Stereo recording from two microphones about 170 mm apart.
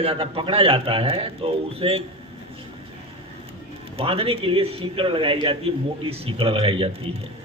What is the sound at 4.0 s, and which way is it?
Speech, 35° right (ahead or behind).